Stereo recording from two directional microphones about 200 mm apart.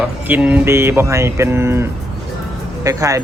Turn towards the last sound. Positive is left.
turn(degrees=-15)  # may be behind; listen again after turning